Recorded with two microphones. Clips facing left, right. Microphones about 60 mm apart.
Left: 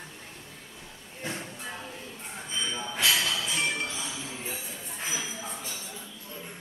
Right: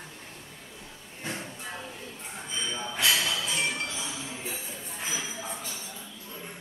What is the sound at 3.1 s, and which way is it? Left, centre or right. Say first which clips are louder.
Music: even; centre.